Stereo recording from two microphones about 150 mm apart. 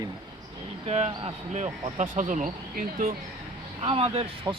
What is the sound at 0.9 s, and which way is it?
Speech, 45° right (ahead or behind).